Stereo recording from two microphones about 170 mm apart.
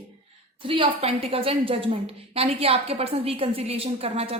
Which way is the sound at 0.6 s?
30° right (ahead or behind).